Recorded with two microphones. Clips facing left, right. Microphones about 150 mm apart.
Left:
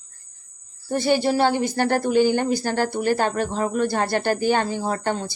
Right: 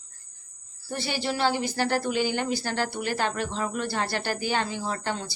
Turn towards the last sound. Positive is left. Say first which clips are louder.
# left 6 dB
turn(degrees=45)  # may be behind; listen again after turning